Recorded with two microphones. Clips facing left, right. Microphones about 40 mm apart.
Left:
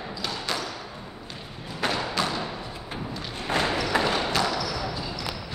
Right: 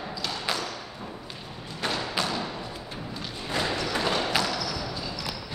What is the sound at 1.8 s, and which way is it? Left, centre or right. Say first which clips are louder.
Thump: left 3 dB; centre.